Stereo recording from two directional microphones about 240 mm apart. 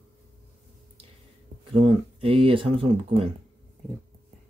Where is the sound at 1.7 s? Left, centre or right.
Right.